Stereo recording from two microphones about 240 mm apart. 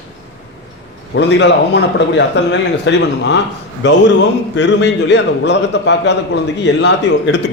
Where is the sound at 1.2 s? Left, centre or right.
Left.